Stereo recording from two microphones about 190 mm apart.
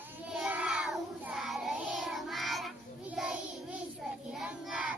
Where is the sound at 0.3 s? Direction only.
5° right (ahead or behind).